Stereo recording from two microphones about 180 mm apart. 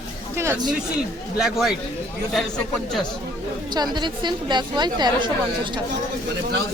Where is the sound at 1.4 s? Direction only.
Centre (ahead or behind).